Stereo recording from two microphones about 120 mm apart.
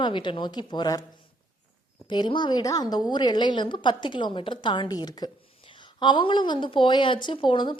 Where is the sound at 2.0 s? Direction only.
40° left (ahead or behind).